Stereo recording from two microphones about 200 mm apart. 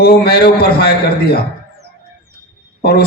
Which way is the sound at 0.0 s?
50° left (ahead or behind).